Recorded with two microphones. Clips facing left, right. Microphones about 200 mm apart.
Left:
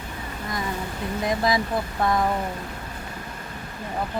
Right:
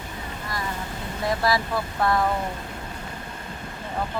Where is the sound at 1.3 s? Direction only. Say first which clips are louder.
Even; 20° left (ahead or behind).